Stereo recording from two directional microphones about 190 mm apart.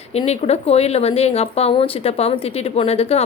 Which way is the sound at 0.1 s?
35° left (ahead or behind).